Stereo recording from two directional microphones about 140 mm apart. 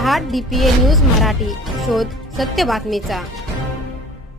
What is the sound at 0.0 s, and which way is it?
Speech, centre (ahead or behind).